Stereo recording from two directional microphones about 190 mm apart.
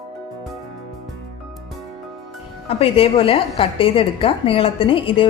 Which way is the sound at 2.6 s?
30° left (ahead or behind).